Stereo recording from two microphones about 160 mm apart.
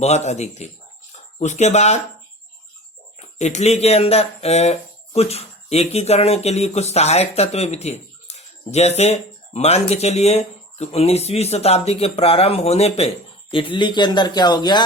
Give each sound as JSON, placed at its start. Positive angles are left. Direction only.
{"t": 0.0, "sound": "speech", "side_deg": 45}
{"t": 3.2, "sound": "speech", "side_deg": 45}